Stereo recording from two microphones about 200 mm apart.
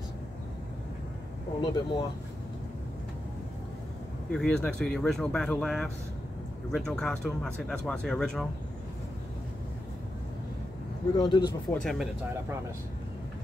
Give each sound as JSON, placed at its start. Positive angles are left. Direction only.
{"t": 1.6, "sound": "speech", "side_deg": 25}
{"t": 4.3, "sound": "speech", "side_deg": 5}
{"t": 11.1, "sound": "speech", "side_deg": 20}
{"t": 11.7, "sound": "speech", "side_deg": 0}